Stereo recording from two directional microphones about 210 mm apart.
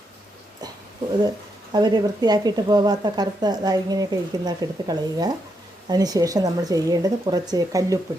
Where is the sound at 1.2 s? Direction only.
20° right (ahead or behind).